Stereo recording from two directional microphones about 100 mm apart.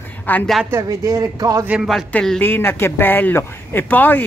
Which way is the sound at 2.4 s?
25° left (ahead or behind).